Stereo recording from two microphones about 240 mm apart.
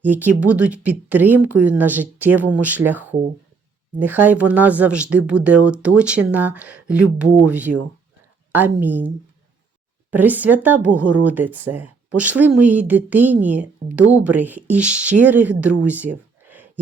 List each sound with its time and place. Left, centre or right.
0.0 s speech: centre
11.0 s speech: right
11.3 s speech: centre
15.8 s a sound: centre